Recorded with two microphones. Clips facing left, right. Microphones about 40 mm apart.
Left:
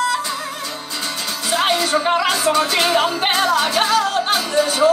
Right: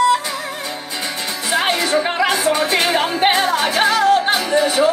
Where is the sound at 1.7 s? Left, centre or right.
Right.